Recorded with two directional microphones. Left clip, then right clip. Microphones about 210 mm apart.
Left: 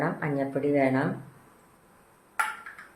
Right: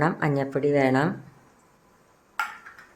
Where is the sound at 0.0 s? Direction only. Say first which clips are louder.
Right 4 dB; 50° right (ahead or behind).